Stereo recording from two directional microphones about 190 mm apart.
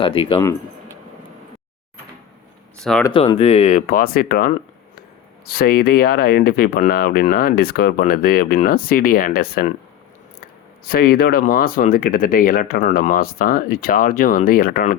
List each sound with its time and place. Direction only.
0.0 s speech: 25° left (ahead or behind)
3.1 s speech: 30° left (ahead or behind); by 4.5 s 50° left (ahead or behind)
5.5 s speech: 55° left (ahead or behind)
10.8 s speech: 50° left (ahead or behind)